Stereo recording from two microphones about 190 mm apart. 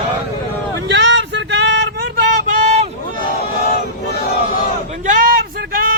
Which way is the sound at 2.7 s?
45° right (ahead or behind).